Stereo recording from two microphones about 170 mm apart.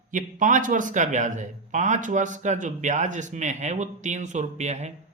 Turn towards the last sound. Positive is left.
turn(degrees=-40)  # may be behind; listen again after turning